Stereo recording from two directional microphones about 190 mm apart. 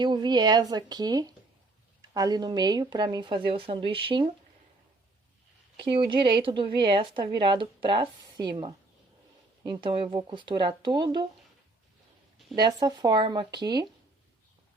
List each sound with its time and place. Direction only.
0.0 s speech: 25° right (ahead or behind)
5.7 s speech: 25° right (ahead or behind)
12.5 s speech: 20° right (ahead or behind)